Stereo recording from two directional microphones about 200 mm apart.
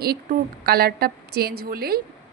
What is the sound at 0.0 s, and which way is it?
Speech, 50° right (ahead or behind).